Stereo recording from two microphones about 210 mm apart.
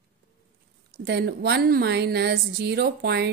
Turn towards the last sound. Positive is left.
turn(degrees=-50)  # may be behind; listen again after turning